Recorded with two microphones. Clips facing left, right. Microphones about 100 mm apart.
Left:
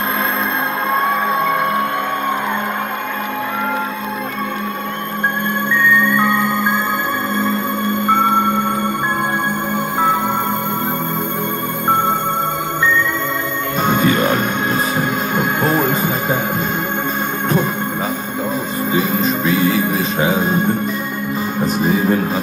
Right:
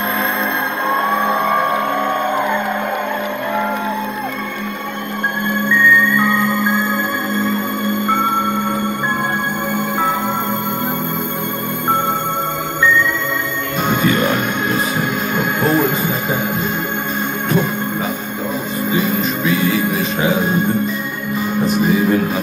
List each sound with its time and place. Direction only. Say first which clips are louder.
13.8 s music: left 1 dB; 40° left (ahead or behind)
18.9 s music: left 1 dB; 40° left (ahead or behind)